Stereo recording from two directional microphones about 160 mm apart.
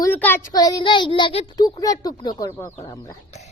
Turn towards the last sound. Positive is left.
turn(degrees=20)  # may be behind; listen again after turning